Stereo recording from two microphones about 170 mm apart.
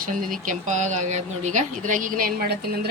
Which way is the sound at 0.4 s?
45° right (ahead or behind).